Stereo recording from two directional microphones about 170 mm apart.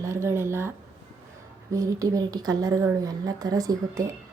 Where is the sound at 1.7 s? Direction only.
20° right (ahead or behind).